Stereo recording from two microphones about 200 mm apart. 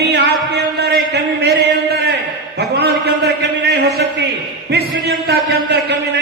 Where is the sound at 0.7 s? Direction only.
55° right (ahead or behind).